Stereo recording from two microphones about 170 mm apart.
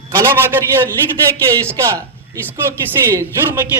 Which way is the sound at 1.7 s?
15° right (ahead or behind).